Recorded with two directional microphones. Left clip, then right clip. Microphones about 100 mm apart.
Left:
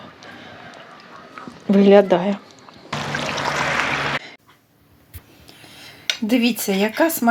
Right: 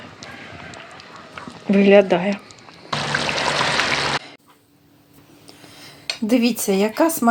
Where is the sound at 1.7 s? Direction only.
20° left (ahead or behind).